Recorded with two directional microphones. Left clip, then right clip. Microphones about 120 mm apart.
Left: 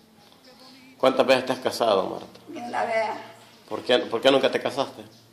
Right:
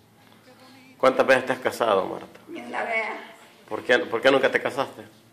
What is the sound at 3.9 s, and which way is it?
A man's voice, 20° left (ahead or behind).